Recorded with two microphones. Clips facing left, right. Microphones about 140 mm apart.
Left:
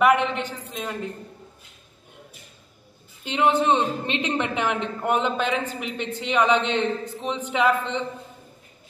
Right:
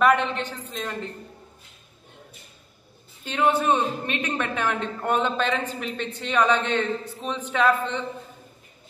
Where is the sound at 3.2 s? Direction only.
20° left (ahead or behind).